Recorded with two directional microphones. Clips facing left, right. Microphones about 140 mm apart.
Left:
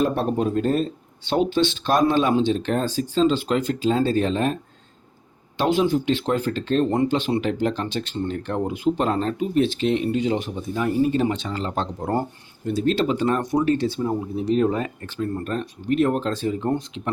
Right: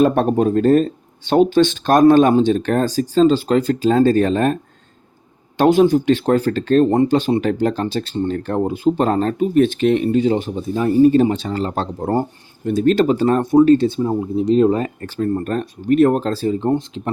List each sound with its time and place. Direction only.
0.0 s speech: 75° right (ahead or behind)
0.3 s speech: 50° right (ahead or behind)
5.5 s speech: 45° right (ahead or behind)
10.2 s speech: 35° right (ahead or behind)
12.6 s speech: 55° right (ahead or behind); by 17.1 s 25° right (ahead or behind)